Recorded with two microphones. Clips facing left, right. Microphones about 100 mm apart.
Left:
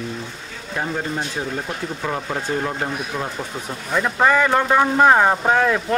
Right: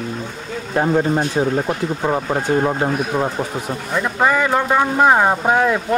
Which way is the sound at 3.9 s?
5° right (ahead or behind).